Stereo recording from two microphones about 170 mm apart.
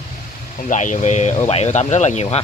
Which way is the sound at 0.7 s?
45° left (ahead or behind).